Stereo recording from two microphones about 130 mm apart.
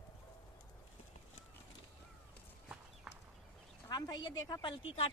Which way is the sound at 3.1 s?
5° right (ahead or behind).